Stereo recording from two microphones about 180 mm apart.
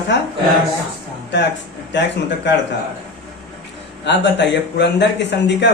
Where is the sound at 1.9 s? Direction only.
75° left (ahead or behind).